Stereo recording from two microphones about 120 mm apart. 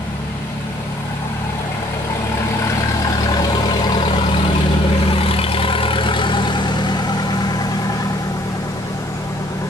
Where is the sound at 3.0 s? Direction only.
35° left (ahead or behind).